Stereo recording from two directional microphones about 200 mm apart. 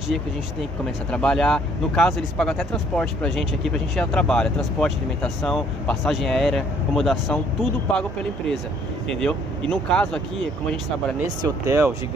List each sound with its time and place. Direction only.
1.1 s speech: 5° left (ahead or behind)
9.1 s speech: centre (ahead or behind)
11.4 s speech: 15° right (ahead or behind)